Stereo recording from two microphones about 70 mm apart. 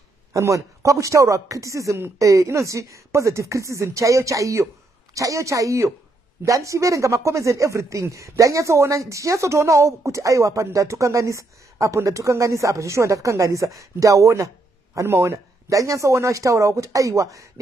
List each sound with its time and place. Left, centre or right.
0.3 s a man's voice: right